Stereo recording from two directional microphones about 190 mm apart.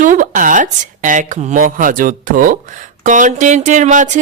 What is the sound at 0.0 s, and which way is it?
A woman's voice, 45° right (ahead or behind).